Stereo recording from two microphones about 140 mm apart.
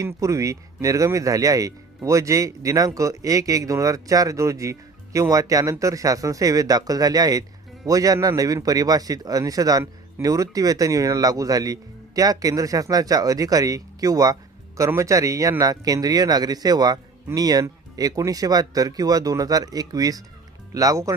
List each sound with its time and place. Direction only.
0.0 s speech: 25° right (ahead or behind)